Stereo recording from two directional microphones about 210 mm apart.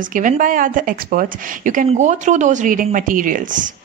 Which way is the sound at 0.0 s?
40° right (ahead or behind).